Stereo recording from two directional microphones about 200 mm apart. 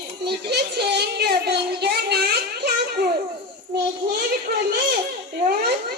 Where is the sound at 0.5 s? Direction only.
55° right (ahead or behind).